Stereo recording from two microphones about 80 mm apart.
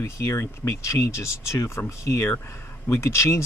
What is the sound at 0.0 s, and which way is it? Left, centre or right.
Speech, left.